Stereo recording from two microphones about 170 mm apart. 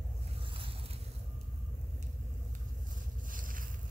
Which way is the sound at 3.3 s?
55° right (ahead or behind).